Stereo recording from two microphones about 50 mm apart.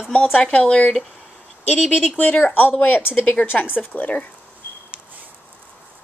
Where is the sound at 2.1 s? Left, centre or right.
Left.